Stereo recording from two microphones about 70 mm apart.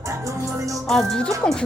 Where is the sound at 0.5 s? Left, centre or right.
Right.